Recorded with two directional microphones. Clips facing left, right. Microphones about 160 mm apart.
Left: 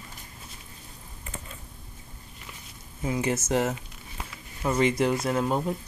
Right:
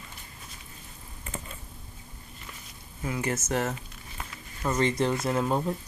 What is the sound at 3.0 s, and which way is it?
Speech, 20° left (ahead or behind).